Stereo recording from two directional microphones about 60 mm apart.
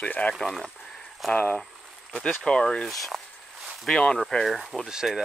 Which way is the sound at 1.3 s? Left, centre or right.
Left.